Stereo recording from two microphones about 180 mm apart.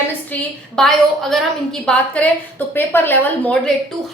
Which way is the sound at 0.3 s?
10° left (ahead or behind).